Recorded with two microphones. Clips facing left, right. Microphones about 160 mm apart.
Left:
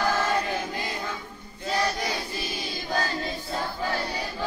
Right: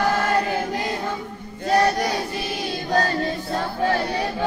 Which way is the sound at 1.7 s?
70° right (ahead or behind).